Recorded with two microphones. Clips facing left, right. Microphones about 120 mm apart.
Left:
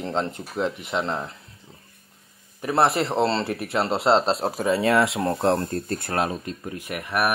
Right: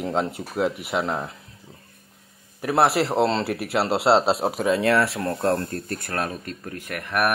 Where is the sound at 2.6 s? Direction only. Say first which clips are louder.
Right 1 dB; 5° right (ahead or behind).